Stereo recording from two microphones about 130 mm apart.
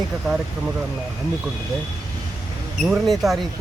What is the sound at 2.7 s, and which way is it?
Speech, centre (ahead or behind).